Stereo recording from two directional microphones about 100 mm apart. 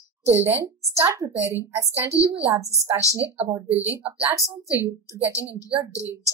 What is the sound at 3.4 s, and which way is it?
Speech, 70° right (ahead or behind).